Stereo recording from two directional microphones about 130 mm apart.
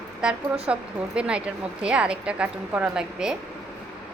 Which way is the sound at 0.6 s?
10° right (ahead or behind).